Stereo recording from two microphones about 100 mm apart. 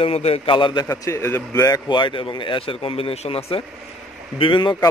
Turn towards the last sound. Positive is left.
turn(degrees=55)  # may be behind; listen again after turning